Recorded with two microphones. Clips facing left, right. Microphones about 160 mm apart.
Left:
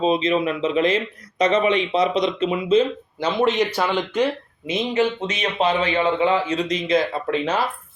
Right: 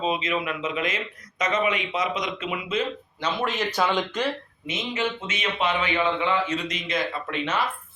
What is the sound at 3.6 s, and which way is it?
Speech, 10° left (ahead or behind).